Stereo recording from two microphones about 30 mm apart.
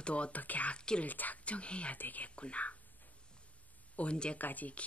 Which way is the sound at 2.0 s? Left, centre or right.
Left.